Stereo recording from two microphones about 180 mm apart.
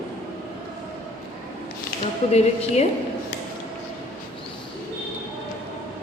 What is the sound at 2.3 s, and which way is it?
Speech, 35° left (ahead or behind).